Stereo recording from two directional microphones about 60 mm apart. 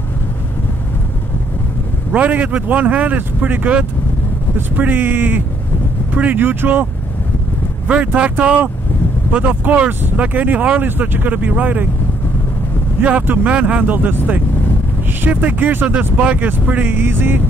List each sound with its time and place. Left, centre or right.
2.1 s speech: right
7.9 s speech: right
13.0 s speech: right